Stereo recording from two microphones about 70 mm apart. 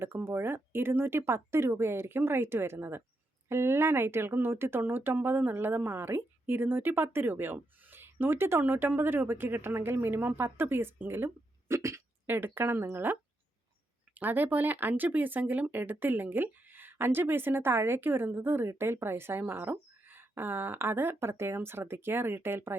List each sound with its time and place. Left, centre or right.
0.0 s speech: right
11.7 s speech: right
14.2 s speech: right